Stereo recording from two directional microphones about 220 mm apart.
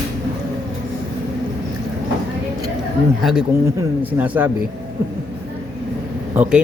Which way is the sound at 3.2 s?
Centre (ahead or behind).